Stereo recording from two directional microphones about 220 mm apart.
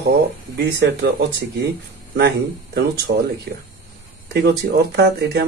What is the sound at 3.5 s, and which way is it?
Speech, 45° right (ahead or behind).